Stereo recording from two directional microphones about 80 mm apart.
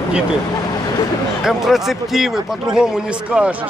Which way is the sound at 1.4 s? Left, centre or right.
Centre.